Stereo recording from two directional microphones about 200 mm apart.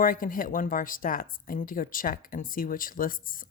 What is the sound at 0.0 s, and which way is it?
Speech, 45° left (ahead or behind).